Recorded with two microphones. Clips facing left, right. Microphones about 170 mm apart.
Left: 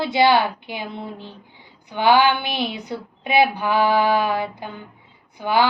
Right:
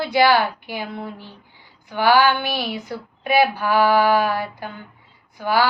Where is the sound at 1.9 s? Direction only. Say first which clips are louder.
Even; 20° left (ahead or behind).